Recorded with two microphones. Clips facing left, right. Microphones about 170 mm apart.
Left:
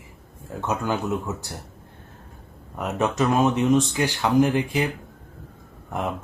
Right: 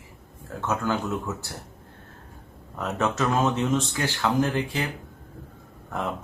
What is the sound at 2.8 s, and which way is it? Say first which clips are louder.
Speech: left 3 dB; 15° left (ahead or behind).